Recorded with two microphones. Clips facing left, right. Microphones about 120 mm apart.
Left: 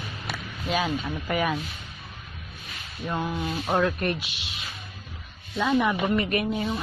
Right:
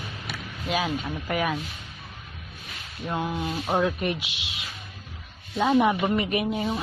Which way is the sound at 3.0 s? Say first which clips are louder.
Even; 15° right (ahead or behind).